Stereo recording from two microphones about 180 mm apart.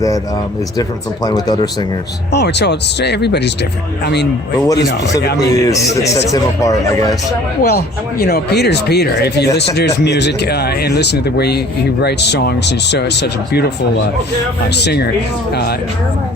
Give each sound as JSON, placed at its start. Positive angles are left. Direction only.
{"t": 0.8, "sound": "speech", "side_deg": 20}
{"t": 2.3, "sound": "speech", "side_deg": 70}
{"t": 5.5, "sound": "a man's voice", "side_deg": 20}
{"t": 7.6, "sound": "speech", "side_deg": 60}
{"t": 14.8, "sound": "speech", "side_deg": 65}